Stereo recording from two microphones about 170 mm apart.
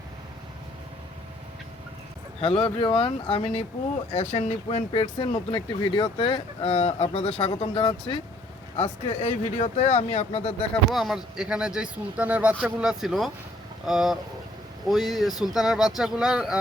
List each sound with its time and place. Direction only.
2.4 s speech: 30° left (ahead or behind)
10.9 s speech: centre (ahead or behind)